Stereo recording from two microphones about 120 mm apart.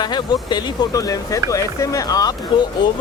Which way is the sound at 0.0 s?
35° left (ahead or behind).